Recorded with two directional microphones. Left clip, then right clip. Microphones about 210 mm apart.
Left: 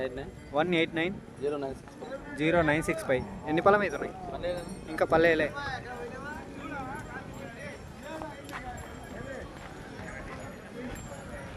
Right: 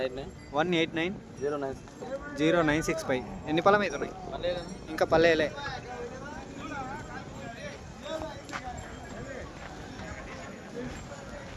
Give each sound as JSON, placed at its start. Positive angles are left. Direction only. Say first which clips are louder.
{"t": 0.5, "sound": "speech", "louder": "even", "side_deg": 0}
{"t": 1.5, "sound": "speech", "louder": "even", "side_deg": -20}
{"t": 2.3, "sound": "speech", "louder": "even", "side_deg": 5}
{"t": 4.4, "sound": "speech", "louder": "right 2 dB", "side_deg": -35}
{"t": 4.9, "sound": "speech", "louder": "right 1 dB", "side_deg": 0}
{"t": 6.6, "sound": "horse", "louder": "right 2 dB", "side_deg": -55}